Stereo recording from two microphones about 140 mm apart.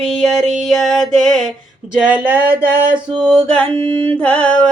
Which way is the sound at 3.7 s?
40° right (ahead or behind).